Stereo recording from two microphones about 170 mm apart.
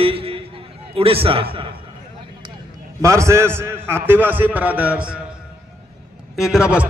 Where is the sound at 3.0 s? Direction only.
15° right (ahead or behind).